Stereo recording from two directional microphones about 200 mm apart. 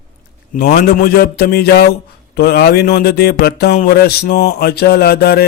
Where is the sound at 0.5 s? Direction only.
50° left (ahead or behind).